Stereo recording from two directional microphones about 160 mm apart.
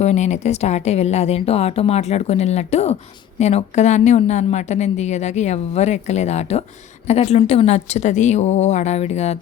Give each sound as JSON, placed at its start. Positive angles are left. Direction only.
{"t": 0.0, "sound": "a woman's voice", "side_deg": 45}